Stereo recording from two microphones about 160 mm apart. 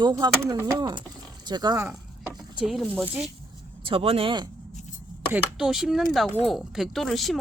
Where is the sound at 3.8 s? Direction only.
35° right (ahead or behind).